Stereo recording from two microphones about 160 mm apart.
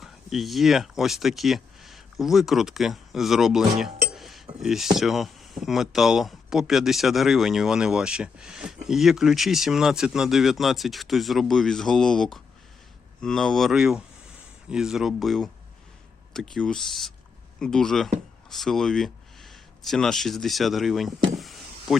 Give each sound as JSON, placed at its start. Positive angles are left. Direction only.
{"t": 0.0, "sound": "speech", "side_deg": 0}